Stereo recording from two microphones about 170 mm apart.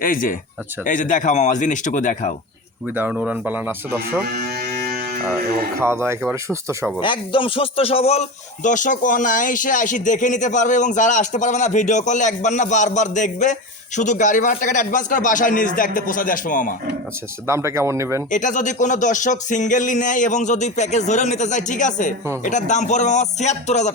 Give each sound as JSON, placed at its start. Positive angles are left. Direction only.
{"t": 0.0, "sound": "speech", "side_deg": 55}
{"t": 2.9, "sound": "speech", "side_deg": -10}
{"t": 4.3, "sound": "music", "side_deg": -70}
{"t": 5.8, "sound": "speech", "side_deg": -15}
{"t": 7.0, "sound": "speech", "side_deg": 30}
{"t": 17.4, "sound": "speech", "side_deg": -15}
{"t": 18.3, "sound": "speech", "side_deg": 45}